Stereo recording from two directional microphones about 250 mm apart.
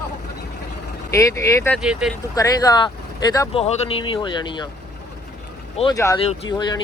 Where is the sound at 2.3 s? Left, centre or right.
Centre.